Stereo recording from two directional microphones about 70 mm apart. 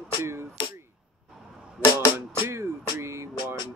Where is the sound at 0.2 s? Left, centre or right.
Right.